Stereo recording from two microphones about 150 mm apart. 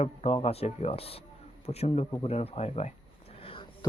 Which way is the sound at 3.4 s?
35° left (ahead or behind).